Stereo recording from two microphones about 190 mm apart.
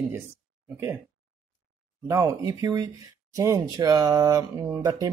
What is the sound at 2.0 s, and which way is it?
Speech, 15° right (ahead or behind).